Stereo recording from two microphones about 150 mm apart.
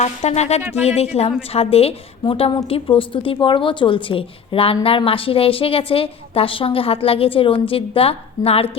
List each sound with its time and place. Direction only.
0.0 s a woman's voice: 45° left (ahead or behind)